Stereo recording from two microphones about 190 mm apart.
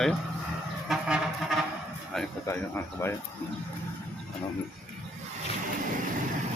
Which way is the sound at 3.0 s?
15° left (ahead or behind).